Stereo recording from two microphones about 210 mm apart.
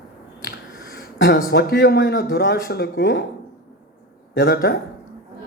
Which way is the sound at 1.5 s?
50° left (ahead or behind).